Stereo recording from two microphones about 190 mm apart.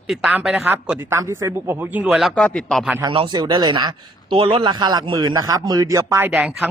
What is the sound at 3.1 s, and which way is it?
Speech, 25° right (ahead or behind).